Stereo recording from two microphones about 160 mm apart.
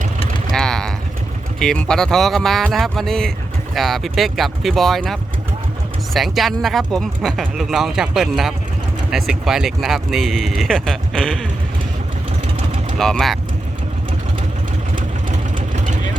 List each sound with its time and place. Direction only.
0.5 s vehicle: 5° left (ahead or behind)
1.5 s speech: 5° left (ahead or behind)
6.1 s speech: centre (ahead or behind)
13.0 s speech: 5° left (ahead or behind)
15.5 s vehicle: 50° right (ahead or behind)